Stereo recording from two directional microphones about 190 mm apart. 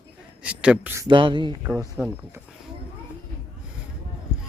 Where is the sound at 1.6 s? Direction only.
10° right (ahead or behind).